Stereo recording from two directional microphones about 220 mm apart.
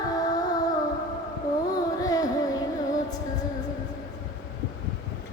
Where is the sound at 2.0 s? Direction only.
15° left (ahead or behind).